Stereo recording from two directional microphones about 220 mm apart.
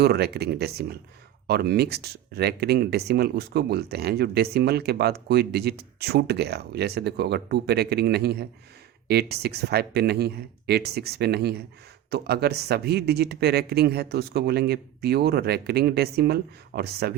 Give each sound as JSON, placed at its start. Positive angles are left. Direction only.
{"t": 0.0, "sound": "speech", "side_deg": -45}